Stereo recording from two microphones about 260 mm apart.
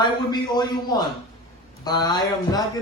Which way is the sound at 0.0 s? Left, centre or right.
Centre.